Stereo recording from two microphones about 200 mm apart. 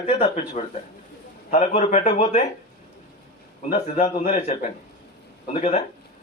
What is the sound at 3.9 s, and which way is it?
Speech, 35° left (ahead or behind).